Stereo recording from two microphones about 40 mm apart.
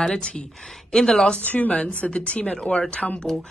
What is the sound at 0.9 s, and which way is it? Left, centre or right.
Speech, centre.